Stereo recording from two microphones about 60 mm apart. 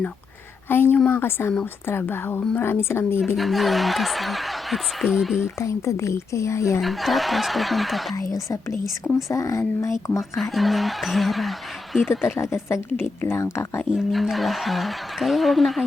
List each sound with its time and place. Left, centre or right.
0.7 s a woman's voice: left
3.3 s speech: centre
5.5 s speech: left
6.8 s speech: centre
8.1 s speech: left
10.3 s speech: centre
12.4 s speech: left
13.9 s speech: centre